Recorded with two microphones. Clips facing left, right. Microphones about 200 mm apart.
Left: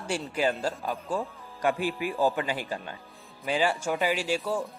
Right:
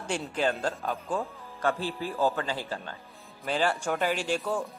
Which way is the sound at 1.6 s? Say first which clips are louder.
Left 2 dB; 15° left (ahead or behind).